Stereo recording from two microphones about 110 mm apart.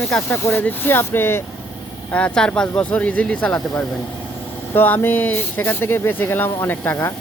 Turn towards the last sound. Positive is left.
turn(degrees=20)  # may be behind; listen again after turning